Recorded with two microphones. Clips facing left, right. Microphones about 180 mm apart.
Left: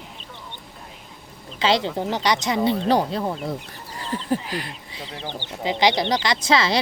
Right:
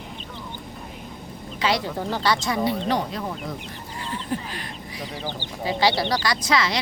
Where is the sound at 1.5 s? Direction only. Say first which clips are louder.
Left 3 dB; 25° left (ahead or behind).